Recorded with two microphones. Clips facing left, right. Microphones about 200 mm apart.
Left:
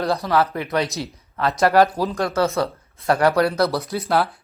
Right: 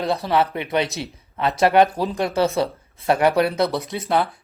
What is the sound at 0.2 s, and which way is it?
Speech, 25° right (ahead or behind).